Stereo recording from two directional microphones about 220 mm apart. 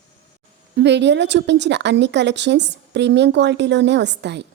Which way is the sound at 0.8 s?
50° right (ahead or behind).